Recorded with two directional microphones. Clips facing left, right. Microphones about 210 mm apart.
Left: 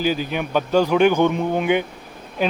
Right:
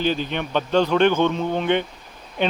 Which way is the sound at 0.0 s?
5° left (ahead or behind).